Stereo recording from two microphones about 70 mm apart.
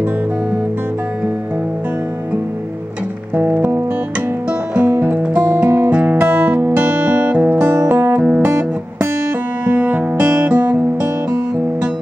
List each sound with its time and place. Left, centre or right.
3.3 s music: right
6.8 s music: right
7.3 s music: right